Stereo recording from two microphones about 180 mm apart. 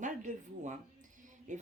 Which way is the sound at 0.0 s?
45° right (ahead or behind).